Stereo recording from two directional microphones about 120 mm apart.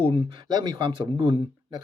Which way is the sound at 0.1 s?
45° right (ahead or behind).